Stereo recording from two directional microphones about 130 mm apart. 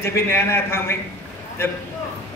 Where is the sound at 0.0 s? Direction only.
20° left (ahead or behind).